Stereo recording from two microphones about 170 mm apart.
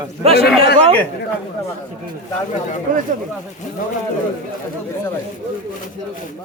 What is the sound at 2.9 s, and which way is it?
Speech, 55° right (ahead or behind).